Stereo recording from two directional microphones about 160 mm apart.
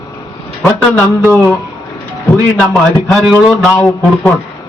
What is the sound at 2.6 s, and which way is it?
Mantra, 5° left (ahead or behind).